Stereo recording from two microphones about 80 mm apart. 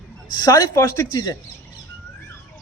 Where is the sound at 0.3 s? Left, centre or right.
Left.